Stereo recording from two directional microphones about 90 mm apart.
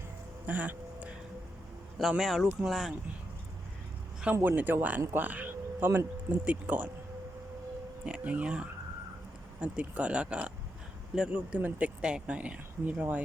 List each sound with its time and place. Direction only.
0.4 s a sound: 20° right (ahead or behind)
2.0 s speech: 5° right (ahead or behind)
4.4 s speech: 20° right (ahead or behind)
6.4 s speech: 15° right (ahead or behind)
8.0 s speech: 15° right (ahead or behind)